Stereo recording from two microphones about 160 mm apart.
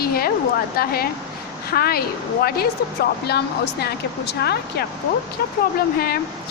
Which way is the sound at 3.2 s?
90° left.